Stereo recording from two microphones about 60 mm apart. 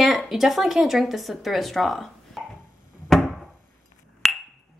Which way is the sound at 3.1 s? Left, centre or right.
Centre.